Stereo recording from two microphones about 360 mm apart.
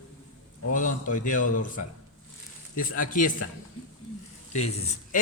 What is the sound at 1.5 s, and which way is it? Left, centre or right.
Speech, left.